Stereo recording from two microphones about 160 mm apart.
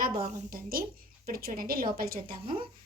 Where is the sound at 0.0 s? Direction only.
65° right (ahead or behind).